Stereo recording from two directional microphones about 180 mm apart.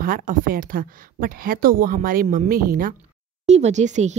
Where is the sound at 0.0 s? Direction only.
50° right (ahead or behind).